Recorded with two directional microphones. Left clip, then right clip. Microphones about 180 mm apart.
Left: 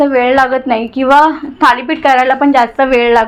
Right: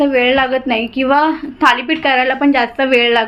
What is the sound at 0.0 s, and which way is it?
A woman's voice, 10° left (ahead or behind).